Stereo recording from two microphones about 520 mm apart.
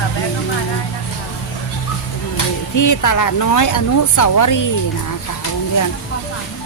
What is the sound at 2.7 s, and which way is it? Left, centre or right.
Speech, left.